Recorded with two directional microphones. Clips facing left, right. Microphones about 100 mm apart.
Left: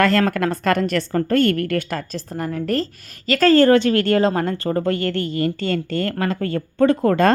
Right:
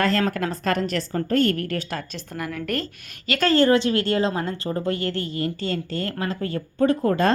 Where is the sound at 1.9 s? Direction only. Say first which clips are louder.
Left 5 dB; 40° left (ahead or behind).